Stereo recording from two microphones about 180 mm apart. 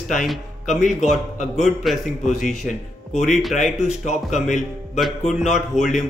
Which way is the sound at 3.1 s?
40° left (ahead or behind).